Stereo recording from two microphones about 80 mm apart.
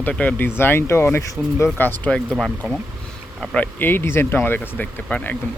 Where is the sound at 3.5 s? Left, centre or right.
Left.